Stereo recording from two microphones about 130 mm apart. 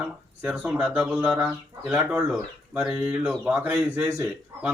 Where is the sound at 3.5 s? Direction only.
20° right (ahead or behind).